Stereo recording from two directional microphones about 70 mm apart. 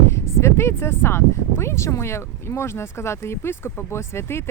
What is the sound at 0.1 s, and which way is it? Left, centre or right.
Speech, left.